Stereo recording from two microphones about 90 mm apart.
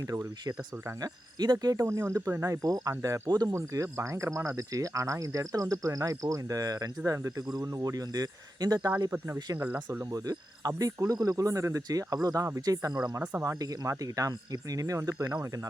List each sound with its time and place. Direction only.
1.0 s speech: 50° right (ahead or behind)
7.0 s speech: 35° right (ahead or behind)
9.0 s speech: 25° right (ahead or behind)
10.0 s speech: 40° right (ahead or behind)